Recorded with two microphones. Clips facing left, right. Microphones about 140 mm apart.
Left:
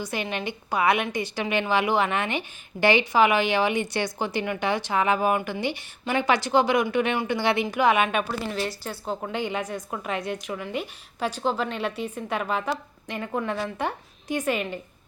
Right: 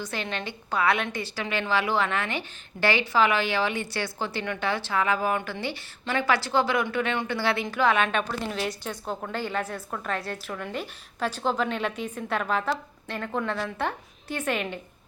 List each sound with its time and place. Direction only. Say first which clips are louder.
0.0 s a woman's voice: left 3 dB; 15° left (ahead or behind)